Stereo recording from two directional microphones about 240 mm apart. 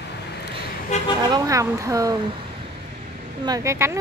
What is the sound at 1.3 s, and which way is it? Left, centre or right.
Speech, centre.